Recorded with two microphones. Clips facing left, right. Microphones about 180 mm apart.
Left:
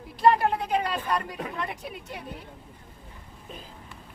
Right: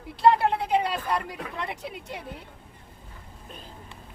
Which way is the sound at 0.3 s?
25° right (ahead or behind).